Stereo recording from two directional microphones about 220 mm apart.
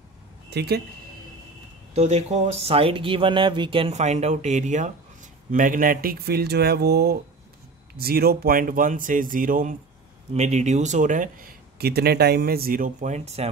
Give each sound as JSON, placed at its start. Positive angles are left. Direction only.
{"t": 0.5, "sound": "speech", "side_deg": -50}
{"t": 2.0, "sound": "speech", "side_deg": -30}